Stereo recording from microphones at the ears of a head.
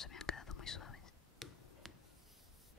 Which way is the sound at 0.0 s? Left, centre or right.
Left.